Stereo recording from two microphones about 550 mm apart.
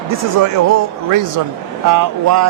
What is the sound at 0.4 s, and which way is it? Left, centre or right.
Speech, right.